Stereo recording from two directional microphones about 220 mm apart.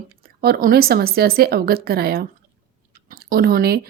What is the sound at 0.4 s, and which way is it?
A woman's voice, 45° right (ahead or behind).